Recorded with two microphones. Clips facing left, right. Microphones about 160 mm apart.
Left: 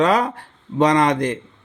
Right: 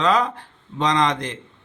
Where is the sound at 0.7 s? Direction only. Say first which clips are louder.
Left 5 dB; 45° left (ahead or behind).